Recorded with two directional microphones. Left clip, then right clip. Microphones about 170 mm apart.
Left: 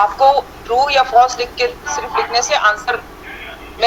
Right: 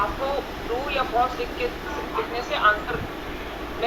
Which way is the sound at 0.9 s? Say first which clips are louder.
Left 11 dB; 85° left.